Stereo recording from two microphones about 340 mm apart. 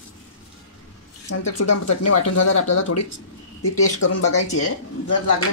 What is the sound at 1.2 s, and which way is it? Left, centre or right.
Speech, left.